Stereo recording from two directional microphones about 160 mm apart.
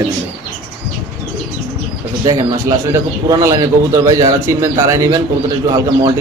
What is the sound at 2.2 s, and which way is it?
Speech, 20° right (ahead or behind).